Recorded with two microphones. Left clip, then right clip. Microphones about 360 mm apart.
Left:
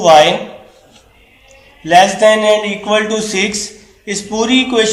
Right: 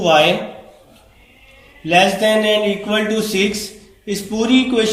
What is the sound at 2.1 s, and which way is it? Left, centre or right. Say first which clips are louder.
Speech: left 5 dB; centre.